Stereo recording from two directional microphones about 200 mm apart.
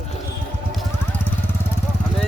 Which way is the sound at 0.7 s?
Centre (ahead or behind).